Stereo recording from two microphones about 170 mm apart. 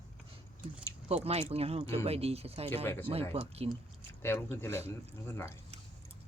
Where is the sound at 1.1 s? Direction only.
35° right (ahead or behind).